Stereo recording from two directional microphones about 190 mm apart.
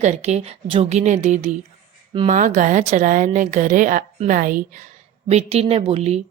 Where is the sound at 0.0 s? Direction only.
35° right (ahead or behind).